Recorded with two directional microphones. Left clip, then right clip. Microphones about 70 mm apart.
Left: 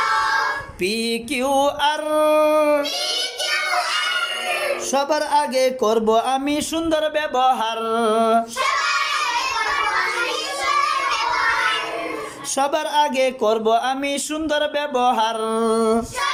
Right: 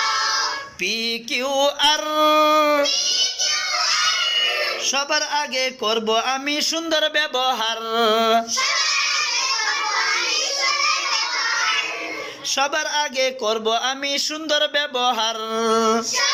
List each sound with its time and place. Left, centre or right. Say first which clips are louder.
1.5 s speech: left 2 dB; left
1.8 s music: right 1 dB; left
5.3 s speech: left 4 dB; left
6.9 s a sound: even; left
13.0 s speech: left 7 dB; left
14.6 s a sound: left 2 dB; left